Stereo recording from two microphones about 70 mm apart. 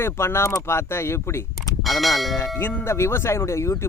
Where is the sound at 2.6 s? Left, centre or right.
Left.